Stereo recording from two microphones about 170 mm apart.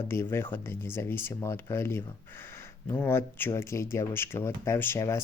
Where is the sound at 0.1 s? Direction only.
15° left (ahead or behind).